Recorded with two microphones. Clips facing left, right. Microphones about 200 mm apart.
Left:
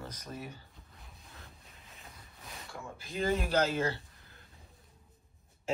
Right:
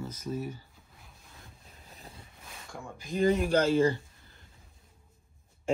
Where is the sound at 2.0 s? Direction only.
30° right (ahead or behind).